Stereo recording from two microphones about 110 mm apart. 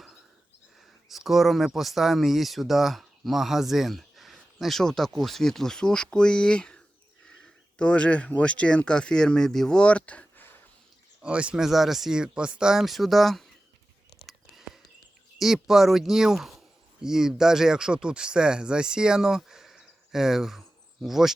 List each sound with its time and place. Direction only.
1.0 s speech: centre (ahead or behind); by 10.5 s 15° left (ahead or behind)
11.2 s speech: 10° right (ahead or behind)
14.1 s a sound: centre (ahead or behind)
15.4 s speech: centre (ahead or behind)